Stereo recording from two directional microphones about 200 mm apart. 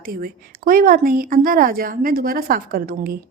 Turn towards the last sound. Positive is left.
turn(degrees=-45)  # may be behind; listen again after turning